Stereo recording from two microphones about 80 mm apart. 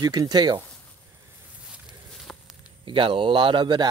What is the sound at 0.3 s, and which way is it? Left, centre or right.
Speech, right.